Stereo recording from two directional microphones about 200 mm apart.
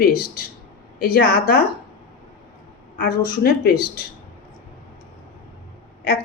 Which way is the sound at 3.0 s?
50° left (ahead or behind).